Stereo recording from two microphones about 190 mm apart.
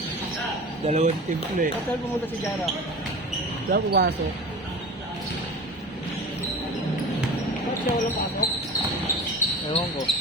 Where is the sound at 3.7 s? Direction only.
50° right (ahead or behind).